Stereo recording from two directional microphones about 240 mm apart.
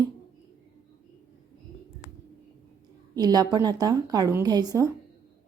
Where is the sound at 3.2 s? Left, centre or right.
Centre.